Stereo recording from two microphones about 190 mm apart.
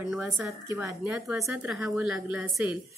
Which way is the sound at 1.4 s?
Centre (ahead or behind).